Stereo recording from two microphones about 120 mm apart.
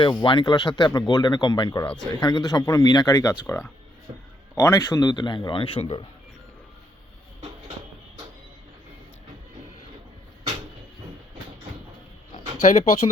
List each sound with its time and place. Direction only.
0.0 s a man's voice: 40° left (ahead or behind)
12.7 s speech: 70° left (ahead or behind)